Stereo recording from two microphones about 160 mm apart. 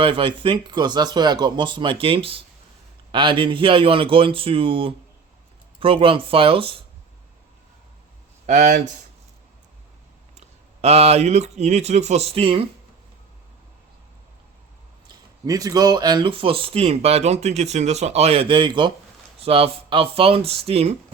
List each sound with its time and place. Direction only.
0.0 s speech: 30° right (ahead or behind)
8.4 s speech: 50° right (ahead or behind)
10.8 s speech: 40° right (ahead or behind)
15.4 s speech: 20° right (ahead or behind); by 20.9 s 40° right (ahead or behind)